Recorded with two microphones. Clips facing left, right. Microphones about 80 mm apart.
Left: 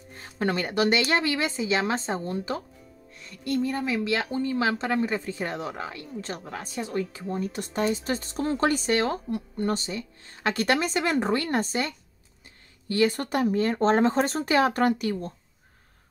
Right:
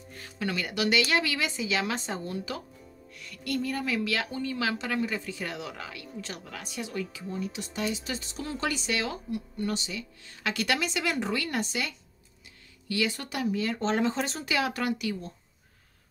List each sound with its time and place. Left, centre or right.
0.1 s speech: left